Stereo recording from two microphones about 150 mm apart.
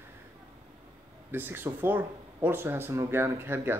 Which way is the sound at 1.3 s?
15° right (ahead or behind).